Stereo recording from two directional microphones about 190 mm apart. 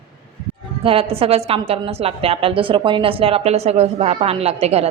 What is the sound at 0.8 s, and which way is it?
A woman's voice, 30° right (ahead or behind).